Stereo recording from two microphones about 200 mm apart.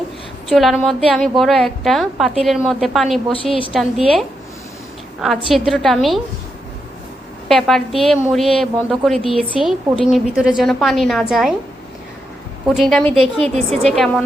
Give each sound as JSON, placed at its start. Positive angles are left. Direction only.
{"t": 0.5, "sound": "a woman's voice", "side_deg": 0}
{"t": 3.3, "sound": "a woman's voice", "side_deg": 25}
{"t": 3.7, "sound": "a woman's voice", "side_deg": 0}
{"t": 7.4, "sound": "a woman's voice", "side_deg": 0}
{"t": 12.6, "sound": "a woman's voice", "side_deg": 0}